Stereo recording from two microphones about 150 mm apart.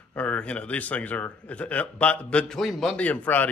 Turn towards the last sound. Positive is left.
turn(degrees=10)  # may be behind; listen again after turning